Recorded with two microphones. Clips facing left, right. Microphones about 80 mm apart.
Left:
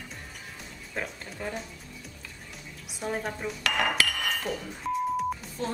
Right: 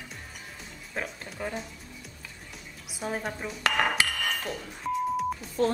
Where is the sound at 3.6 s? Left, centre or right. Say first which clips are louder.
Right 1 dB; right.